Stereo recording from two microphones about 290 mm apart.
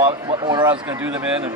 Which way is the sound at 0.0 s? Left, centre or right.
Centre.